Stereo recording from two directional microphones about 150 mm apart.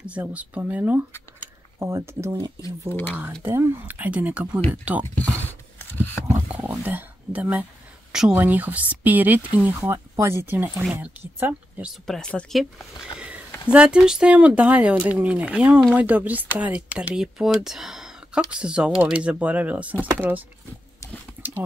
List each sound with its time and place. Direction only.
0.0 s speech: 10° right (ahead or behind)
3.4 s speech: 15° right (ahead or behind)
5.4 s a sound: 10° left (ahead or behind)
6.5 s a sound: 10° right (ahead or behind)
8.1 s speech: 5° right (ahead or behind)
12.1 s speech: 5° left (ahead or behind)
13.7 s speech: 5° right (ahead or behind)